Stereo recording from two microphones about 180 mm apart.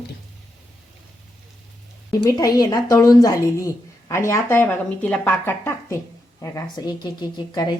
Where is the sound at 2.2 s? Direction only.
20° left (ahead or behind).